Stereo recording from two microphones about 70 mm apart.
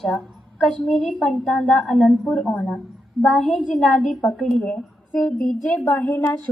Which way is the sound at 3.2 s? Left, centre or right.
Centre.